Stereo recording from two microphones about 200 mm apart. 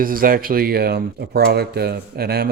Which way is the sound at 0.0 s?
45° right (ahead or behind).